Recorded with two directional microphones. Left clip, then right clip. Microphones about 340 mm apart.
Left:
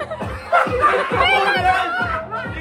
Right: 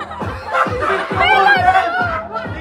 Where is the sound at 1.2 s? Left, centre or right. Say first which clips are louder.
Right 6 dB; right.